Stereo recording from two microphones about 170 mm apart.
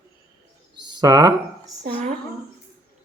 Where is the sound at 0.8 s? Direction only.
25° right (ahead or behind).